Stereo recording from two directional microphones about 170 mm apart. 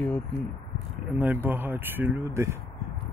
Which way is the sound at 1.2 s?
10° right (ahead or behind).